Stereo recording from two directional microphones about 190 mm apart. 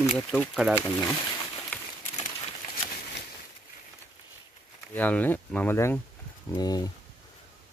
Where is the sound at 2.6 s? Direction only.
45° left (ahead or behind).